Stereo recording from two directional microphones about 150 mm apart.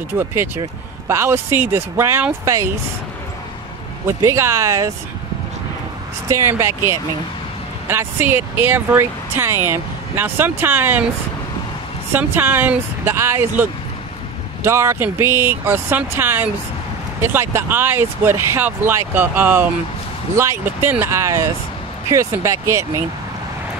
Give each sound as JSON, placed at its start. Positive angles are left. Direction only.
{"t": 0.1, "sound": "speech", "side_deg": -15}
{"t": 4.2, "sound": "speech", "side_deg": -20}
{"t": 6.2, "sound": "speech", "side_deg": -20}
{"t": 12.1, "sound": "speech", "side_deg": -10}